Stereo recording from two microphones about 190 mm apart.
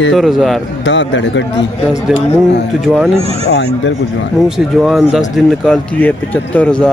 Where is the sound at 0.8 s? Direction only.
75° left (ahead or behind).